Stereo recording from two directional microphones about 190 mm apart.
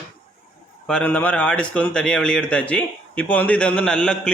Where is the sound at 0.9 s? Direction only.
10° left (ahead or behind).